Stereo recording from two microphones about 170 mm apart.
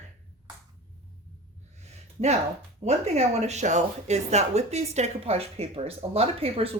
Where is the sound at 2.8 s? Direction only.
40° right (ahead or behind).